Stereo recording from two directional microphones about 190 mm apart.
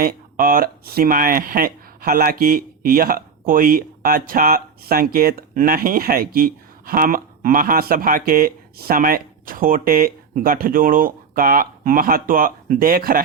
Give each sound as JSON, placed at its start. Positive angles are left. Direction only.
{"t": 0.0, "sound": "speech", "side_deg": -50}